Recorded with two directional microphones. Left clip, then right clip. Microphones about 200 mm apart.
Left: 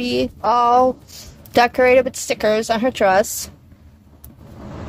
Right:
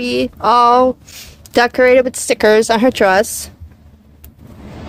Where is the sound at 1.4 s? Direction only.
25° right (ahead or behind).